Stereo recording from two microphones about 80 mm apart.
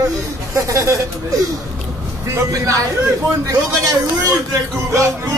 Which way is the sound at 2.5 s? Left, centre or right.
Right.